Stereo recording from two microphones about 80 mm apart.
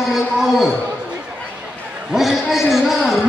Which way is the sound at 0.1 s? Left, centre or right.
Centre.